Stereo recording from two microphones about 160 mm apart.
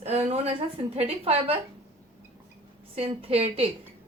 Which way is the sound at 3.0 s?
35° right (ahead or behind).